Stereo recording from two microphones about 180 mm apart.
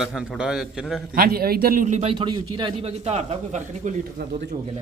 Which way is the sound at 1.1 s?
55° right (ahead or behind).